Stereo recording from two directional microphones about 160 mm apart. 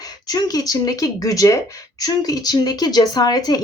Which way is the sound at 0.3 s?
25° left (ahead or behind).